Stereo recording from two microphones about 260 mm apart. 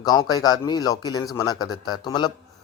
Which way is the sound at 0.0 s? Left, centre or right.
Centre.